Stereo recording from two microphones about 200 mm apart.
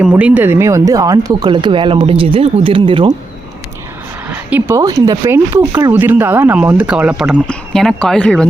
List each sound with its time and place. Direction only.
0.0 s speech: 5° right (ahead or behind); by 3.2 s 25° right (ahead or behind)
4.3 s speech: 10° right (ahead or behind)